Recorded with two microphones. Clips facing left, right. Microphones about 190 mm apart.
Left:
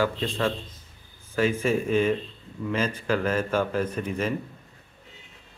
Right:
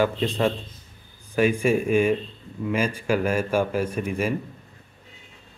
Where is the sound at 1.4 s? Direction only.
15° right (ahead or behind).